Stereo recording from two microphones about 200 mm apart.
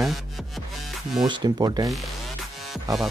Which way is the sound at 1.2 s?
20° right (ahead or behind).